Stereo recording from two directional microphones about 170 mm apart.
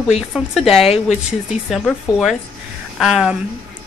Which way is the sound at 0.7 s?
35° left (ahead or behind).